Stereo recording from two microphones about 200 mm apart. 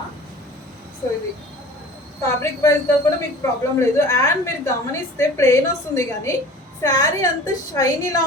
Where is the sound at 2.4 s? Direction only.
15° left (ahead or behind).